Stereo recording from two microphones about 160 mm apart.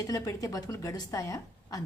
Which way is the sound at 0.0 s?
25° left (ahead or behind).